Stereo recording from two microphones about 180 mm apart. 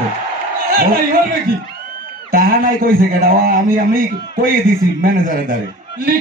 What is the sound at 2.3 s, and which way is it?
A man's voice, 55° right (ahead or behind).